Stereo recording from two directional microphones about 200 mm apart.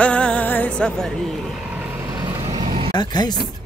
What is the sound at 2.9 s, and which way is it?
Speech, 20° left (ahead or behind).